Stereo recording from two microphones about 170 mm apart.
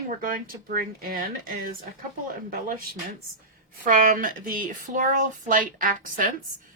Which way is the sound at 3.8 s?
55° right (ahead or behind).